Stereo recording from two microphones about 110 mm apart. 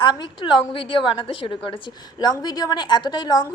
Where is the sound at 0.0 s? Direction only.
45° left (ahead or behind).